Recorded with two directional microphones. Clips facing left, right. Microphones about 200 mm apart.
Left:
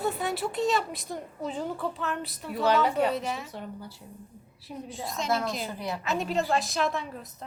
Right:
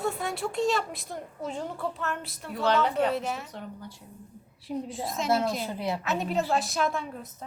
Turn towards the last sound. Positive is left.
turn(degrees=0)  # may be behind; listen again after turning